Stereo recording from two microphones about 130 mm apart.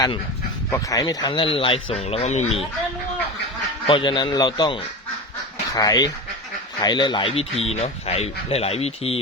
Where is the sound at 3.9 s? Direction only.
40° left (ahead or behind).